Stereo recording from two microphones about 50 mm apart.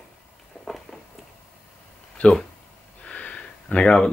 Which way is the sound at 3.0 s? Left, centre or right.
Left.